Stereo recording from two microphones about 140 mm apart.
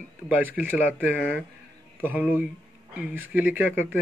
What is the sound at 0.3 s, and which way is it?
Speech, 10° right (ahead or behind).